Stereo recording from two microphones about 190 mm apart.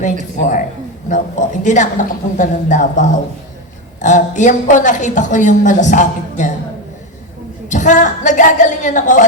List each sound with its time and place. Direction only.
0.0 s a woman's voice: 40° left (ahead or behind)
7.7 s a woman's voice: 40° left (ahead or behind)